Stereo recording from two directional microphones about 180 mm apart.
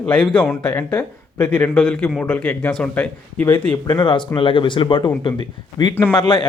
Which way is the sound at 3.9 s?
25° left (ahead or behind).